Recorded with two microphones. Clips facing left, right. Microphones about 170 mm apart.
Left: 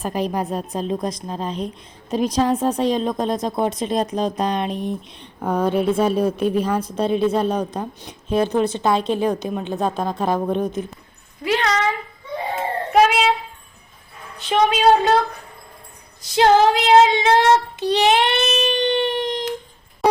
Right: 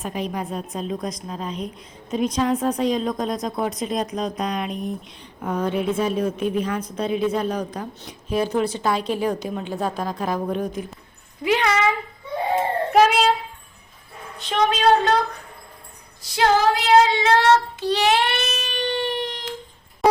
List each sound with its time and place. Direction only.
0.0 s a woman's voice: 35° left (ahead or behind)
11.4 s speech: 10° right (ahead or behind)
12.9 s speech: centre (ahead or behind)
14.3 s a woman's voice: 10° left (ahead or behind)
16.3 s child singing: 20° left (ahead or behind)